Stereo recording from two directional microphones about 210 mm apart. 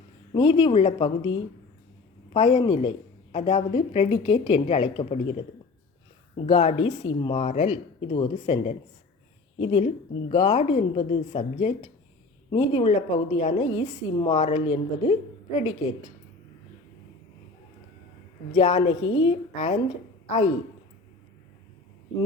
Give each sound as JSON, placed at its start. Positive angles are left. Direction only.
{"t": 0.3, "sound": "a woman's voice", "side_deg": 20}
{"t": 18.5, "sound": "a woman's voice", "side_deg": 30}